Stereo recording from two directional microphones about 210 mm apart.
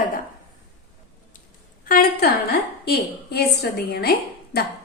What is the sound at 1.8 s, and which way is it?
A woman's voice, 45° left (ahead or behind).